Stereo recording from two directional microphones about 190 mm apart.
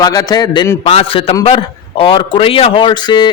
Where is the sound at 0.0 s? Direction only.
20° left (ahead or behind).